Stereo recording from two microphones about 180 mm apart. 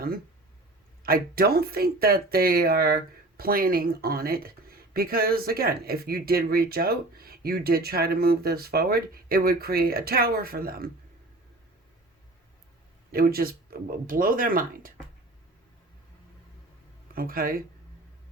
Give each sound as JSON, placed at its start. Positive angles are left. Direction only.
{"t": 1.0, "sound": "speech", "side_deg": -55}
{"t": 13.1, "sound": "speech", "side_deg": -55}
{"t": 17.2, "sound": "speech", "side_deg": -55}